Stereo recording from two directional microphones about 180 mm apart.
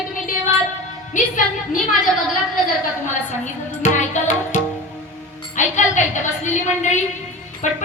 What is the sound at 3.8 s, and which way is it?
Music, 40° left (ahead or behind).